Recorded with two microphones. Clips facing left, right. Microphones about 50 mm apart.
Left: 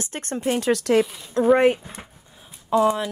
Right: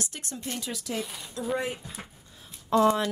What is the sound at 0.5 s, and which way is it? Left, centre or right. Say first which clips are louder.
Speech: left 15 dB; left.